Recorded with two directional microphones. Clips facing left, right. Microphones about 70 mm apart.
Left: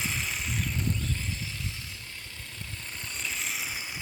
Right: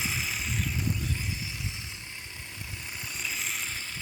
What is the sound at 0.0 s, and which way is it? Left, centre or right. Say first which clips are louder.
Vehicle: even; centre.